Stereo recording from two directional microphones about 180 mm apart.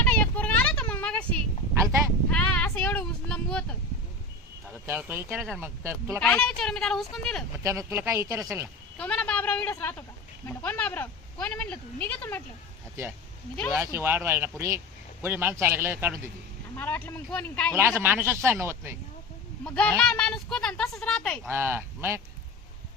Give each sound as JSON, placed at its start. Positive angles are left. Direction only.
{"t": 0.0, "sound": "a sound", "side_deg": 10}
{"t": 2.3, "sound": "a sound", "side_deg": 5}
{"t": 4.9, "sound": "speech", "side_deg": -10}
{"t": 5.3, "sound": "speech", "side_deg": 0}
{"t": 5.5, "sound": "speech", "side_deg": -15}
{"t": 6.1, "sound": "speech", "side_deg": 5}
{"t": 7.6, "sound": "speech", "side_deg": -15}
{"t": 9.0, "sound": "speech", "side_deg": 5}
{"t": 13.7, "sound": "speech", "side_deg": -15}
{"t": 16.7, "sound": "speech", "side_deg": 10}
{"t": 17.7, "sound": "speech", "side_deg": -15}
{"t": 19.6, "sound": "speech", "side_deg": 5}
{"t": 21.4, "sound": "speech", "side_deg": -10}